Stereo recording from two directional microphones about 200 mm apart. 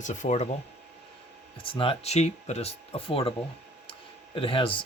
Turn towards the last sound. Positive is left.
turn(degrees=25)  # may be behind; listen again after turning